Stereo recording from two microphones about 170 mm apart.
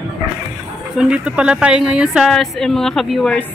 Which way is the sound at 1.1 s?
5° right (ahead or behind).